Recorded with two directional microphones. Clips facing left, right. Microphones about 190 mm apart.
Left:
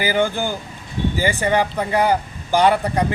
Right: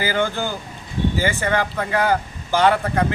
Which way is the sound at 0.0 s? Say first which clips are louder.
Left 2 dB; 15° left (ahead or behind).